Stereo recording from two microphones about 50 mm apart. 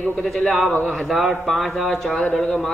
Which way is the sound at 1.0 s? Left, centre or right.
Centre.